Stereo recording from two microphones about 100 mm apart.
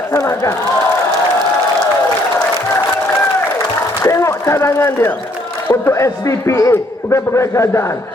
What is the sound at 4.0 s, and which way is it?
A man's voice, 30° left (ahead or behind).